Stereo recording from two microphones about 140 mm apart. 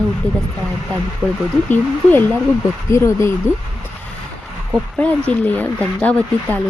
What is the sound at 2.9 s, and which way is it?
Speech, 20° left (ahead or behind).